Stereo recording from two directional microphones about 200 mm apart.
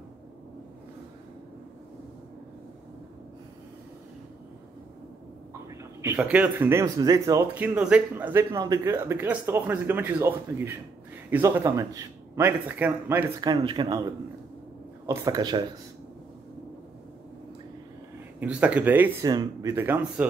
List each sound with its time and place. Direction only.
5.5 s a sound: 15° right (ahead or behind)
6.1 s speech: 5° right (ahead or behind)
13.4 s a man's voice: 20° right (ahead or behind)
18.4 s speech: 5° right (ahead or behind)